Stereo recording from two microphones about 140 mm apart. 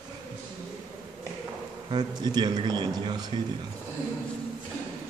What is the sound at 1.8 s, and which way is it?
Speech, 30° right (ahead or behind).